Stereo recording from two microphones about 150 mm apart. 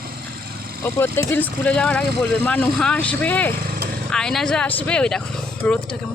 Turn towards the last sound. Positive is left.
turn(degrees=5)  # may be behind; listen again after turning